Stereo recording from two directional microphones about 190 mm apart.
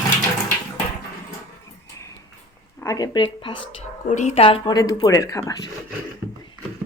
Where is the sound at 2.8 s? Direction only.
20° left (ahead or behind).